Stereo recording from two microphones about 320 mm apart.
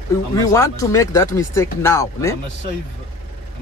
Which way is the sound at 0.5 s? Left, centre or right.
Centre.